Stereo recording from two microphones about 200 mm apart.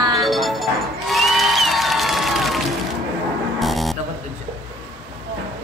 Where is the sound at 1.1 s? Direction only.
Centre (ahead or behind).